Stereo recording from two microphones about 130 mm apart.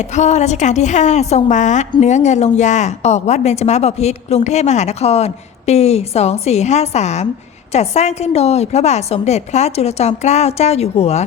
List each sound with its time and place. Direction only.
0.0 s a woman's voice: 65° left (ahead or behind)